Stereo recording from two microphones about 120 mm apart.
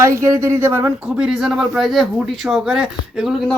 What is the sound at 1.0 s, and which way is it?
Speech, 10° right (ahead or behind).